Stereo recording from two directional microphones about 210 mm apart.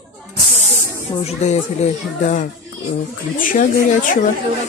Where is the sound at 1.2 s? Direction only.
30° left (ahead or behind).